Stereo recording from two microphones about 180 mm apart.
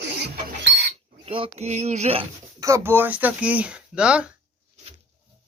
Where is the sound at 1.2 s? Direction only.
30° right (ahead or behind).